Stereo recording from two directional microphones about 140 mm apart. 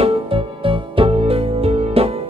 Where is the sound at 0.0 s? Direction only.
40° right (ahead or behind).